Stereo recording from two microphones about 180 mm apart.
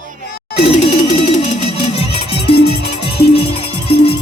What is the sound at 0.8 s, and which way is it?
Music, 40° left (ahead or behind).